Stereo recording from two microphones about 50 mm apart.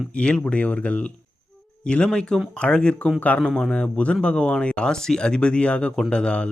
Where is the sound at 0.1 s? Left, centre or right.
Left.